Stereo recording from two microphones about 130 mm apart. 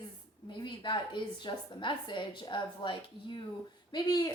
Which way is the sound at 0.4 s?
35° left (ahead or behind).